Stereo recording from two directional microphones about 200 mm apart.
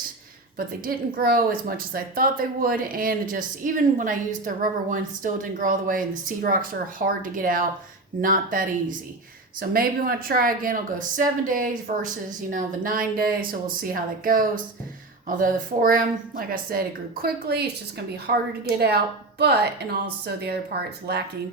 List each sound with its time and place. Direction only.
0.5 s a woman's voice: 45° right (ahead or behind)